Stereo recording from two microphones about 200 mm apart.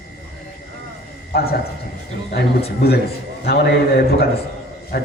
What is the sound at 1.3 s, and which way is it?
Speech, 50° left (ahead or behind).